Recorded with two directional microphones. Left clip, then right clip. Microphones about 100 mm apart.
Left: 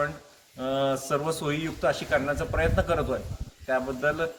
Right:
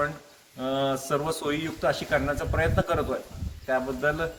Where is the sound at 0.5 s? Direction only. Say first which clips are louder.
Even; centre (ahead or behind).